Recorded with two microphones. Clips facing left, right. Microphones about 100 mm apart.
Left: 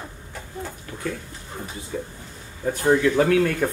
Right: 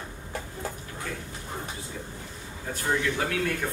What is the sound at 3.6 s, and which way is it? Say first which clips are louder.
Speech: left 8 dB; 50° left (ahead or behind).